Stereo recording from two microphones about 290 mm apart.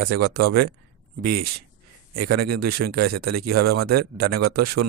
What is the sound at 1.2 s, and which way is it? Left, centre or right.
A man's voice, right.